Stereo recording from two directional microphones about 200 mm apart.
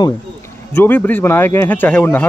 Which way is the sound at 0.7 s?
10° left (ahead or behind).